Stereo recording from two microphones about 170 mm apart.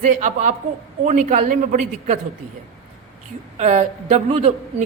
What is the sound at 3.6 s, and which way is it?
Speech, 45° right (ahead or behind).